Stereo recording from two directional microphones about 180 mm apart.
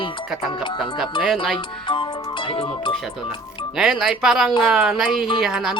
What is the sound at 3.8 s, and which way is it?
Speech, 5° right (ahead or behind).